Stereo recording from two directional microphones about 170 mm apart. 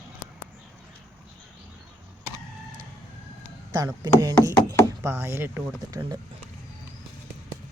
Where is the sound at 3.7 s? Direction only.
20° right (ahead or behind).